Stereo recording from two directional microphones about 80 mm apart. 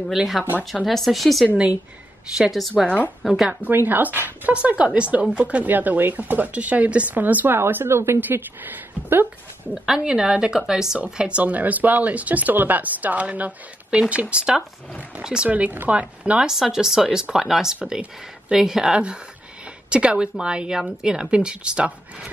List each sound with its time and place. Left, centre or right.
0.1 s speech: centre
3.6 s speech: right
9.8 s speech: centre